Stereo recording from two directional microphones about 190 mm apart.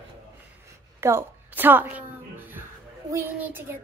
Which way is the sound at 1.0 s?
10° right (ahead or behind).